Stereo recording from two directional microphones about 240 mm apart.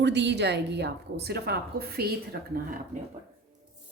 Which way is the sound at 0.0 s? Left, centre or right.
Right.